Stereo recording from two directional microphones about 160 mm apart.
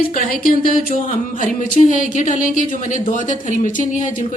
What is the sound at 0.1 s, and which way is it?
Speech, 60° left (ahead or behind).